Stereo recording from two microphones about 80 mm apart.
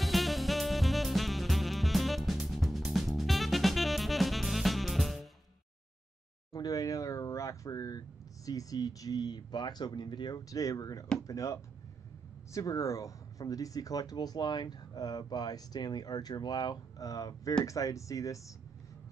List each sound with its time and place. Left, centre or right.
0.0 s music: centre
6.5 s speech: left